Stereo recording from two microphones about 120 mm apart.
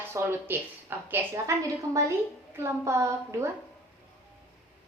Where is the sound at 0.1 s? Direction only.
20° right (ahead or behind).